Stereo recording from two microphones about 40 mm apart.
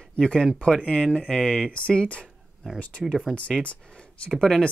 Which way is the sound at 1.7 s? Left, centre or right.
Left.